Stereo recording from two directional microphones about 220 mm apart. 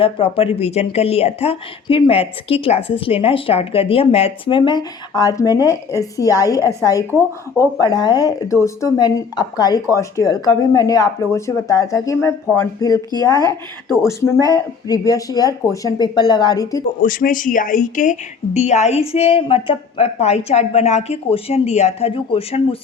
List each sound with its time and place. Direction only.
0.0 s a woman's voice: 25° left (ahead or behind)
14.0 s speech: 15° left (ahead or behind)
17.0 s a woman's voice: 40° left (ahead or behind)